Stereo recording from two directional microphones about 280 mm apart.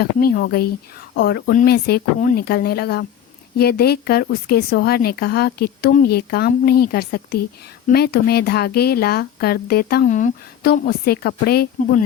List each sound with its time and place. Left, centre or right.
0.0 s speech: left